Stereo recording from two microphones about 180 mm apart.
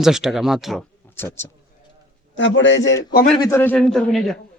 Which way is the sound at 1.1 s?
15° left (ahead or behind).